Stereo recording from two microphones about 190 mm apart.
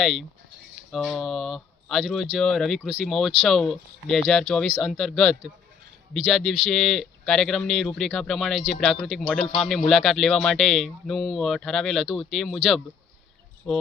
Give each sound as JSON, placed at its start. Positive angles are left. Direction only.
{"t": 0.0, "sound": "speech", "side_deg": 0}
{"t": 6.7, "sound": "speech", "side_deg": 0}
{"t": 13.7, "sound": "speech", "side_deg": 5}